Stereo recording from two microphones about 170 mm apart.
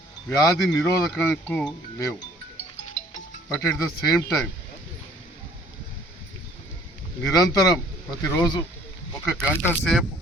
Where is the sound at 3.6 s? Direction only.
15° left (ahead or behind).